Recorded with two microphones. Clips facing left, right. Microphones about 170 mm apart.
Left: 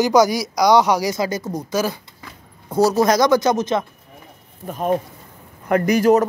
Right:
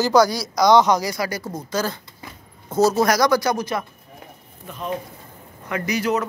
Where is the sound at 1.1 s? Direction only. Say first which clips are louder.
Left 4 dB; 20° left (ahead or behind).